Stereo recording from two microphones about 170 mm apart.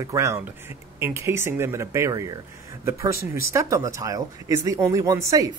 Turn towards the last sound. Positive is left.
turn(degrees=-20)  # may be behind; listen again after turning